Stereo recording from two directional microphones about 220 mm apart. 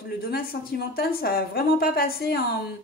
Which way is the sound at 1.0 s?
45° left (ahead or behind).